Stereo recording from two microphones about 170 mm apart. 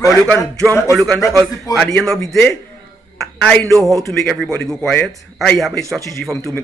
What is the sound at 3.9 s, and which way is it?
Speech, 20° right (ahead or behind).